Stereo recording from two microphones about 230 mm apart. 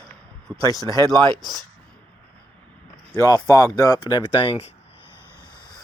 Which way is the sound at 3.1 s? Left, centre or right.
Centre.